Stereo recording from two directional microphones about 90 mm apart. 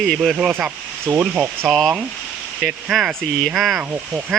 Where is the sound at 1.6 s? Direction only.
Centre (ahead or behind).